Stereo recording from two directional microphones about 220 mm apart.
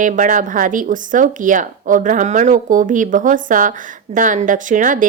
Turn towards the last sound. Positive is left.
turn(degrees=-35)  # may be behind; listen again after turning